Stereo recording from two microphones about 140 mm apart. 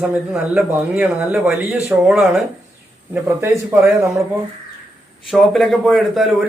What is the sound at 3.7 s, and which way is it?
Speech, 15° right (ahead or behind).